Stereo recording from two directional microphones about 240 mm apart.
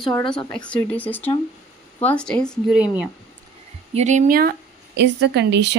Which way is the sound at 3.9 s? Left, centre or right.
Right.